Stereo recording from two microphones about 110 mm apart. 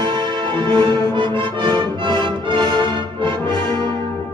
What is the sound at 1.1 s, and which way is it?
Music, 50° right (ahead or behind).